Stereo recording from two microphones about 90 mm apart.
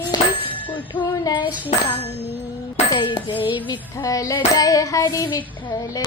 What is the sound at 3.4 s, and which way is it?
Music, 65° left (ahead or behind).